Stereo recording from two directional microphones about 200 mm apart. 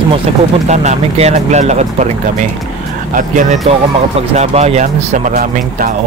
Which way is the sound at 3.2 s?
40° right (ahead or behind).